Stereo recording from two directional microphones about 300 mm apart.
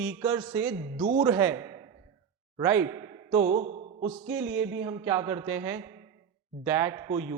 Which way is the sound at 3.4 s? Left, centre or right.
Right.